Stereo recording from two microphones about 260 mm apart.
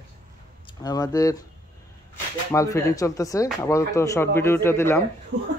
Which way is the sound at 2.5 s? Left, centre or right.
Centre.